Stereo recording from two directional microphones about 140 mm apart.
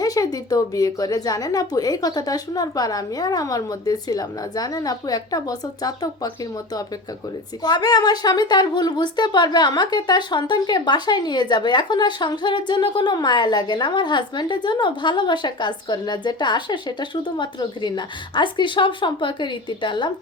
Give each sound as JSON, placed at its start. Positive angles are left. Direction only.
{"t": 0.0, "sound": "a woman's voice", "side_deg": 25}
{"t": 7.6, "sound": "speech", "side_deg": 30}